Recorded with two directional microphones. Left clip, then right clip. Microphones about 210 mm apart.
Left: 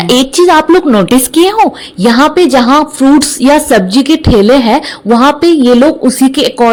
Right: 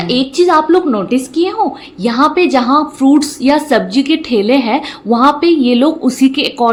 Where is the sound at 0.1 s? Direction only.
40° left (ahead or behind).